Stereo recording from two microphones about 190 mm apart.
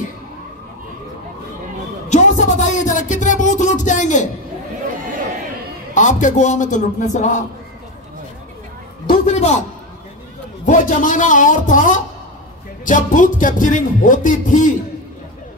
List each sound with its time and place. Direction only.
2.0 s a sound: 40° left (ahead or behind)
5.9 s a man's voice: 40° left (ahead or behind)
9.2 s a man's voice: 35° left (ahead or behind)
10.6 s music: 45° left (ahead or behind)